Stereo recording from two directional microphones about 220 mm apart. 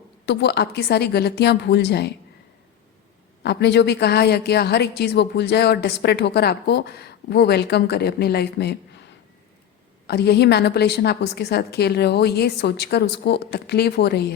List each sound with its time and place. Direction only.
0.3 s a woman's voice: 50° left (ahead or behind)
3.4 s a woman's voice: 50° left (ahead or behind)
10.1 s a woman's voice: 50° left (ahead or behind)